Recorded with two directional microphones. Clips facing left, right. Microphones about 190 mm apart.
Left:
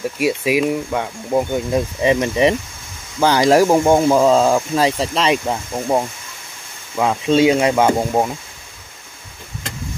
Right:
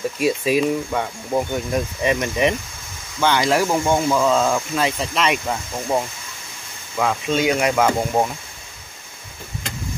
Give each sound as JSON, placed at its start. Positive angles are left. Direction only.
{"t": 0.2, "sound": "speech", "side_deg": 10}
{"t": 1.7, "sound": "speech", "side_deg": 25}